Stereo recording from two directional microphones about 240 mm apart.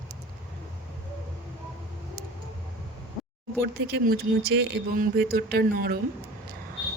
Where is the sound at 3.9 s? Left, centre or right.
Right.